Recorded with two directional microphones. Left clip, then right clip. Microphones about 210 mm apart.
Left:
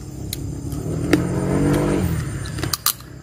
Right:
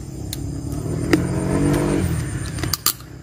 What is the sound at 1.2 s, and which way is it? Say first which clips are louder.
Vehicle: even; 50° right (ahead or behind).